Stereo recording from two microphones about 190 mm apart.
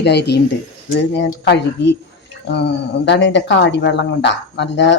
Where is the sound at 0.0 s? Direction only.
60° left (ahead or behind).